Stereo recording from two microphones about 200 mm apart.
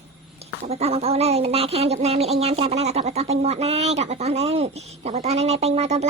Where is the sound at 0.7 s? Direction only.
30° right (ahead or behind).